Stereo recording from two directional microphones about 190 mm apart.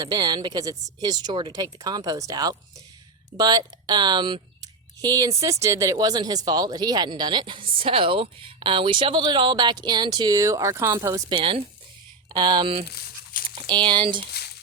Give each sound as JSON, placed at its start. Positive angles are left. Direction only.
{"t": 0.0, "sound": "speech", "side_deg": -20}
{"t": 12.9, "sound": "crumpling", "side_deg": 55}
{"t": 13.7, "sound": "speech", "side_deg": -25}